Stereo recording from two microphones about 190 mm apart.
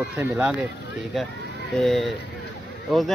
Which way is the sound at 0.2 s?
10° right (ahead or behind).